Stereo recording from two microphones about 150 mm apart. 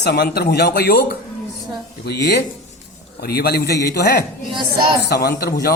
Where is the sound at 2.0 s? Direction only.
90° left.